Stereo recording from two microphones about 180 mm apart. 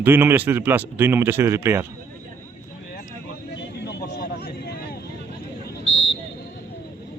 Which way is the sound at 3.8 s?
65° left (ahead or behind).